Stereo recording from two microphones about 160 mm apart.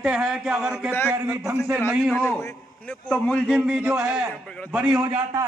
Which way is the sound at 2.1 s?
10° left (ahead or behind).